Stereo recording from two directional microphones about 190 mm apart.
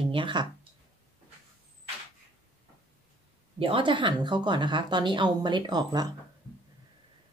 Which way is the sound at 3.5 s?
25° right (ahead or behind).